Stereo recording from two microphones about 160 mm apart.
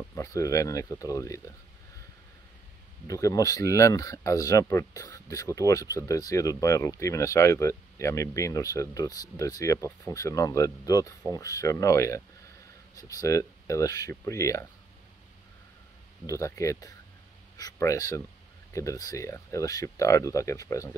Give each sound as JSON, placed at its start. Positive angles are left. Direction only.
{"t": 0.1, "sound": "speech", "side_deg": 20}
{"t": 3.1, "sound": "speech", "side_deg": 20}
{"t": 16.3, "sound": "speech", "side_deg": 20}